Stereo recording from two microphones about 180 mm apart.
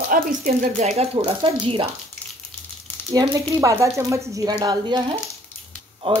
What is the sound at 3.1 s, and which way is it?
Speech, 20° right (ahead or behind).